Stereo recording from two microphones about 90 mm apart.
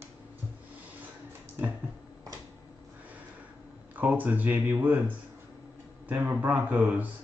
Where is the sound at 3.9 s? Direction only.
20° right (ahead or behind).